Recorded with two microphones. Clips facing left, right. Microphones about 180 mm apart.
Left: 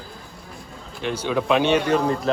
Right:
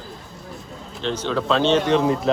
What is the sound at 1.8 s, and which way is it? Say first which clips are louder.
Speech: right 2 dB; centre (ahead or behind).